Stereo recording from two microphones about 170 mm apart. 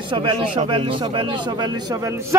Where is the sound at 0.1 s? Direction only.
30° right (ahead or behind).